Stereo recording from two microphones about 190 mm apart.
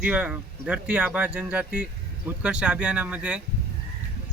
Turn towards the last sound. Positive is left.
turn(degrees=-5)  # may be behind; listen again after turning